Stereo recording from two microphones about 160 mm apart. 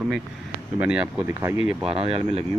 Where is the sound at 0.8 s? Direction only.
10° right (ahead or behind).